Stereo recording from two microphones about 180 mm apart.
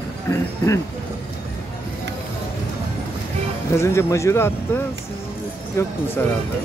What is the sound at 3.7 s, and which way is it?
Speech, 15° left (ahead or behind).